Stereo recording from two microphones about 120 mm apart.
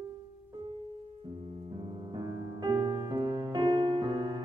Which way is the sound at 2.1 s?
35° right (ahead or behind).